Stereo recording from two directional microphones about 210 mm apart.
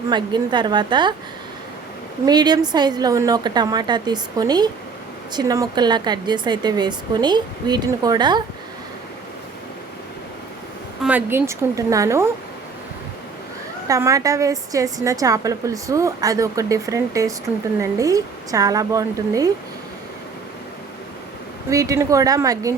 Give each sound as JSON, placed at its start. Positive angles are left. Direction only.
{"t": 0.1, "sound": "a woman's voice", "side_deg": -20}
{"t": 2.2, "sound": "a woman's voice", "side_deg": -20}
{"t": 11.0, "sound": "a woman's voice", "side_deg": -10}
{"t": 13.8, "sound": "a woman's voice", "side_deg": -15}
{"t": 21.7, "sound": "a woman's voice", "side_deg": -15}